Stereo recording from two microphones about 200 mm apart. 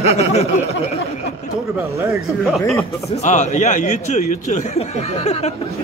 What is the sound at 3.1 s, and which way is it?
Speech, 35° left (ahead or behind).